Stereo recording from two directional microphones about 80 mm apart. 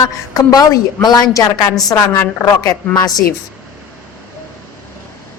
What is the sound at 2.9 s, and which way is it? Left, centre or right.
Speech, left.